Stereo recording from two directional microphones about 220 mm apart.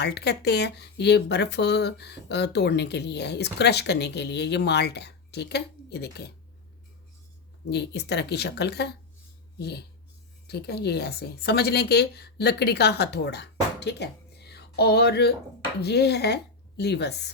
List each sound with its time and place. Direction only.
0.0 s speech: 50° left (ahead or behind)
7.7 s a woman's voice: 50° left (ahead or behind)